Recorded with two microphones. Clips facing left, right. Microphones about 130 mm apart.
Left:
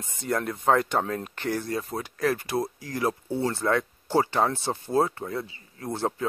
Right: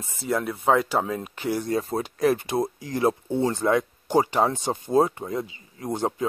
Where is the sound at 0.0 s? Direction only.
5° right (ahead or behind).